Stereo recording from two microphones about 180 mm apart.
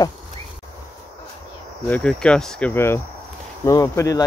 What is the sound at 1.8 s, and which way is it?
Speech, 5° left (ahead or behind).